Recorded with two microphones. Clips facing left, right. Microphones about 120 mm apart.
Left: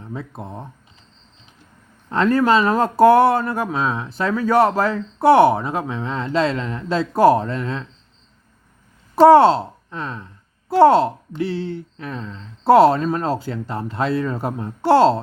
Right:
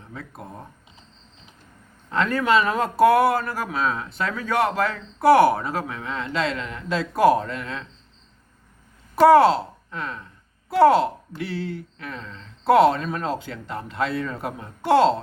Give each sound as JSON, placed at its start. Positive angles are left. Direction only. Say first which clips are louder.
{"t": 0.1, "sound": "speech", "louder": "left 6 dB", "side_deg": 25}
{"t": 2.0, "sound": "speech", "louder": "left 5 dB", "side_deg": 30}
{"t": 9.1, "sound": "a woman's voice", "louder": "left 4 dB", "side_deg": 30}